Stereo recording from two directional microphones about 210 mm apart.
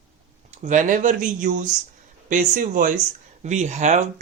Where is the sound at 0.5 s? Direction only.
35° right (ahead or behind).